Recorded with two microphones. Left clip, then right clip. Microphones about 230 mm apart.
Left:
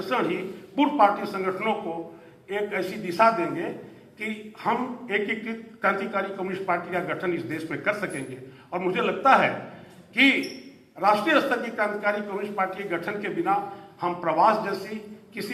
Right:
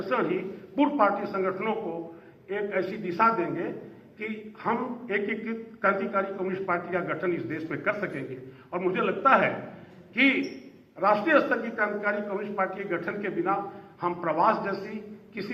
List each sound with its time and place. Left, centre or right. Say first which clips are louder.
0.0 s a man's voice: left 1 dB; left
10.9 s a man's voice: left 1 dB; left